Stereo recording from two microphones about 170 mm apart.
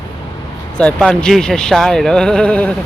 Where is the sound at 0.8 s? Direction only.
5° left (ahead or behind).